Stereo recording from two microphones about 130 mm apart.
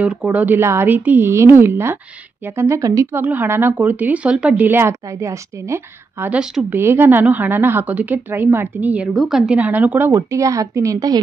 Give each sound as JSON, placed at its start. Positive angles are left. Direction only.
{"t": 0.0, "sound": "a woman's voice", "side_deg": -10}
{"t": 3.2, "sound": "a woman's voice", "side_deg": -15}
{"t": 6.3, "sound": "speech", "side_deg": -5}
{"t": 6.7, "sound": "a woman's voice", "side_deg": -20}